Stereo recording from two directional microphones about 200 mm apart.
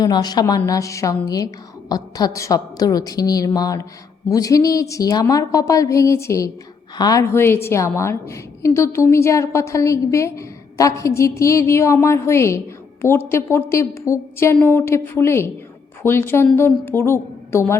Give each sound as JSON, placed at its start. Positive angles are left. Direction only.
{"t": 0.0, "sound": "a woman's voice", "side_deg": 20}